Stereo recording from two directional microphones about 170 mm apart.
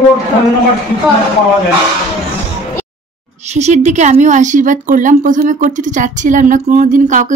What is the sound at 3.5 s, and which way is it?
Speech, 40° right (ahead or behind).